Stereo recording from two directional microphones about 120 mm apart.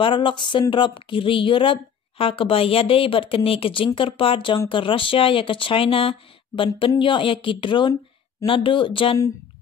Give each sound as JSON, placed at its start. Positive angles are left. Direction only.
{"t": 0.0, "sound": "a woman's voice", "side_deg": 45}